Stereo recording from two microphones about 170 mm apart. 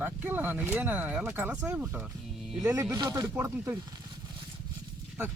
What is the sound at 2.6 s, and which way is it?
Speech, 20° right (ahead or behind).